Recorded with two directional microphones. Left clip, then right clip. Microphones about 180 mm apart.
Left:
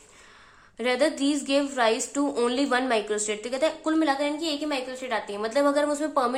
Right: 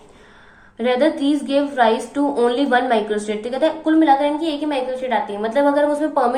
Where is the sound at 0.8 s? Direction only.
25° left (ahead or behind).